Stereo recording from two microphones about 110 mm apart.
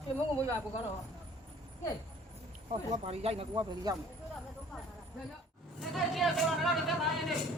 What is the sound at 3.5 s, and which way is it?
Speech, 40° right (ahead or behind).